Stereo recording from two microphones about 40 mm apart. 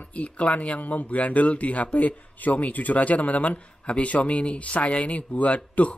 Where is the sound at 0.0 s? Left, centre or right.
Left.